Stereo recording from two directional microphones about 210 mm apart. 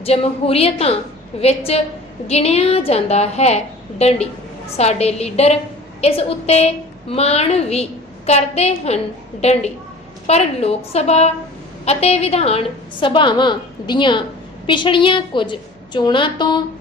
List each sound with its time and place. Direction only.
0.0 s a woman's voice: 30° left (ahead or behind)